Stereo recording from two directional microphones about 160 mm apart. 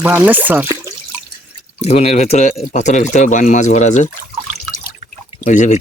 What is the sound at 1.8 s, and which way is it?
Speech, 45° left (ahead or behind).